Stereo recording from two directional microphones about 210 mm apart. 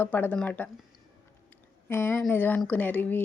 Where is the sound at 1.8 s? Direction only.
10° left (ahead or behind).